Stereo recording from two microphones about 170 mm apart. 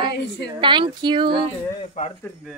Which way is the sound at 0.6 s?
25° right (ahead or behind).